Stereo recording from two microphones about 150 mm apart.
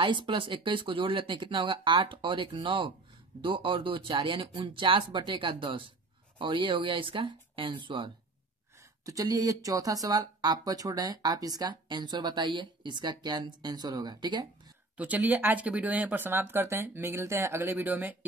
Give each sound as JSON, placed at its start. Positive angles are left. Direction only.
{"t": 0.0, "sound": "speech", "side_deg": -35}
{"t": 15.0, "sound": "speech", "side_deg": -10}